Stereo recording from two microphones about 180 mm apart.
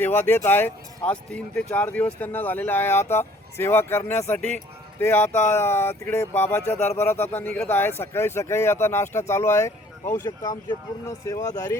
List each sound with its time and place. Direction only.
0.0 s speech: 10° left (ahead or behind)